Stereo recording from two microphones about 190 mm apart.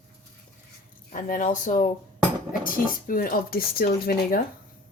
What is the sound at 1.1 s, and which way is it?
Speech, 45° left (ahead or behind).